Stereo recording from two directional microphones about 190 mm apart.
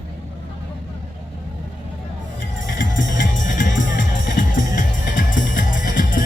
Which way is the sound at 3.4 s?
45° left (ahead or behind).